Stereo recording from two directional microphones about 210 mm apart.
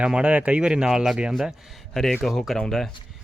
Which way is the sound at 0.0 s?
5° right (ahead or behind).